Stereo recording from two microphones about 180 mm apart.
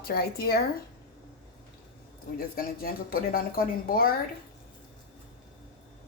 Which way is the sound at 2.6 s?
55° left (ahead or behind).